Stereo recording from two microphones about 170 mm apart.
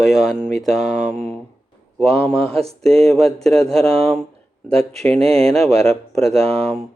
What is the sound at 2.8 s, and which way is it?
Speech, 5° left (ahead or behind).